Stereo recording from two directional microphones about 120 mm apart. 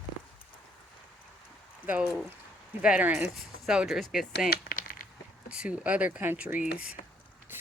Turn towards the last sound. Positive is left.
turn(degrees=-10)  # may be behind; listen again after turning